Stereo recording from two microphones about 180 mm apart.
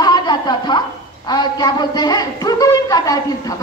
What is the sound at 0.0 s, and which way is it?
A woman's voice, 25° left (ahead or behind).